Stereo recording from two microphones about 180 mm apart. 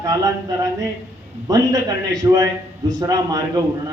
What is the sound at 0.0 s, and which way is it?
A man's voice, 20° right (ahead or behind).